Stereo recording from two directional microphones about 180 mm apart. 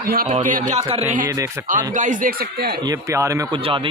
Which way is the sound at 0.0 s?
55° right (ahead or behind).